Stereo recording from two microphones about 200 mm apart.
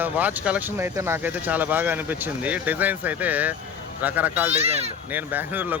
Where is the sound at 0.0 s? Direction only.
10° right (ahead or behind).